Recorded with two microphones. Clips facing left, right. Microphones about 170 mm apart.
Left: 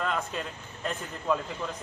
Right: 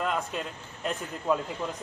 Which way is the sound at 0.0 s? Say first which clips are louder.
Right 1 dB; 10° right (ahead or behind).